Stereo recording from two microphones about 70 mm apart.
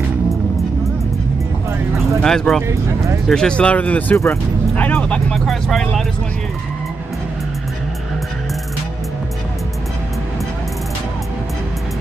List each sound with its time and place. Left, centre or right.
2.2 s speech: centre; by 4.2 s left
4.7 s music: left
5.3 s speech: centre